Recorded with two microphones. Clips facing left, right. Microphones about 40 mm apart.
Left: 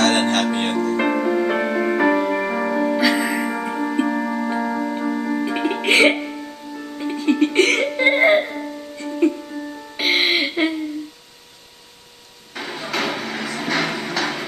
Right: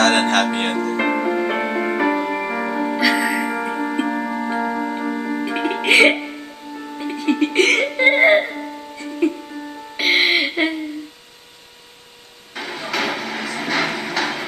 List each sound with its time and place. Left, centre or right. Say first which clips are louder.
0.5 s speech: even; right
0.7 s music: even; centre
12.5 s a sound: right 1 dB; centre